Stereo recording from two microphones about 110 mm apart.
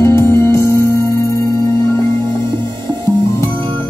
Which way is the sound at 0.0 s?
25° left (ahead or behind).